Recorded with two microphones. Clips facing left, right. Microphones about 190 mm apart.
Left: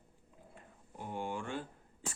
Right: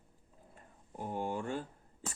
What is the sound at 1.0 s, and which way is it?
Speech, 40° right (ahead or behind).